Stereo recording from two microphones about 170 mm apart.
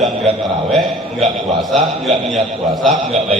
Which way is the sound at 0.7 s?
Centre (ahead or behind).